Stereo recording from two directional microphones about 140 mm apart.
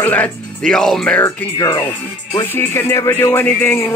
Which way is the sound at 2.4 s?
15° left (ahead or behind).